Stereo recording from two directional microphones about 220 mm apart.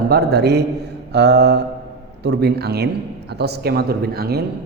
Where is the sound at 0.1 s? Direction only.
45° right (ahead or behind).